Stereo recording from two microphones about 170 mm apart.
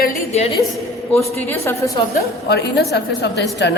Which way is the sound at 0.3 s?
40° left (ahead or behind).